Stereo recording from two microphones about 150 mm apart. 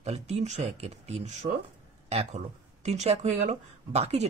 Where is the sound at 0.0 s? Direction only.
45° right (ahead or behind).